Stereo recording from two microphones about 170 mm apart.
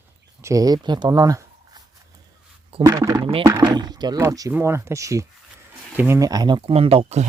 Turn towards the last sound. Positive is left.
turn(degrees=-35)  # may be behind; listen again after turning